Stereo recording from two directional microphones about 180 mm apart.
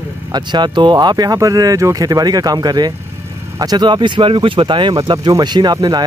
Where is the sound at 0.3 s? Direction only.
25° right (ahead or behind).